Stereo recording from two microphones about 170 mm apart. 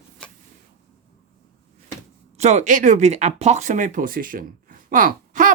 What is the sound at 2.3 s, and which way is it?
Speech, 40° right (ahead or behind).